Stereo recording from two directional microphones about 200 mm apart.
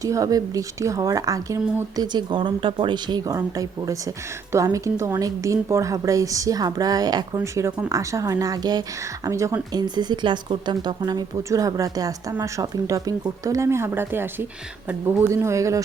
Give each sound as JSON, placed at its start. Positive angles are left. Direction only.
{"t": 0.0, "sound": "speech", "side_deg": -15}